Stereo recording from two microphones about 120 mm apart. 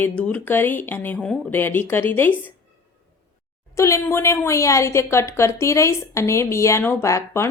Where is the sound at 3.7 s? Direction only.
25° left (ahead or behind).